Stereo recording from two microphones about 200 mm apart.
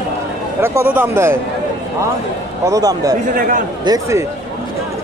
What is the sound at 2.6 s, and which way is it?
Speech, 20° right (ahead or behind).